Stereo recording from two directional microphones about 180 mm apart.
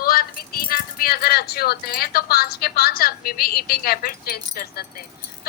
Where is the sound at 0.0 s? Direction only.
55° left (ahead or behind).